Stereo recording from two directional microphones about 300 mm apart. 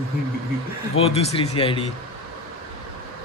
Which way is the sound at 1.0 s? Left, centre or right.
Centre.